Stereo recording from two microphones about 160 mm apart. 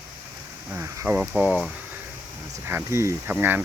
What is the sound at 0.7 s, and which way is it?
Speech, 15° right (ahead or behind).